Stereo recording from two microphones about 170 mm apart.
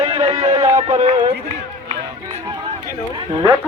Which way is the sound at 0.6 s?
20° right (ahead or behind).